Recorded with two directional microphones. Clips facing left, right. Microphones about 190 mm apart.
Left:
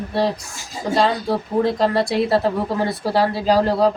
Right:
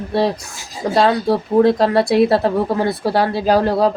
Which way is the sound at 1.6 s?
65° right (ahead or behind).